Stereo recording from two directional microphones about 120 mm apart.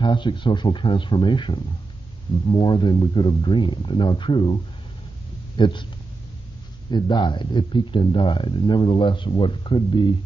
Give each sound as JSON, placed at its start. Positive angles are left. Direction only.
{"t": 0.0, "sound": "speech", "side_deg": 40}
{"t": 5.6, "sound": "speech", "side_deg": 40}
{"t": 6.9, "sound": "speech", "side_deg": 40}